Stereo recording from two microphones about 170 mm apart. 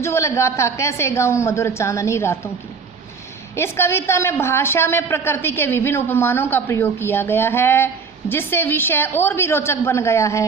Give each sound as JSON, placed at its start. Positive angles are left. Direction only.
{"t": 0.0, "sound": "a woman's voice", "side_deg": 15}
{"t": 3.5, "sound": "a woman's voice", "side_deg": 15}